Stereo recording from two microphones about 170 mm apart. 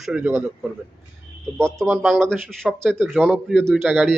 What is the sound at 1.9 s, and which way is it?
A man's voice, centre (ahead or behind).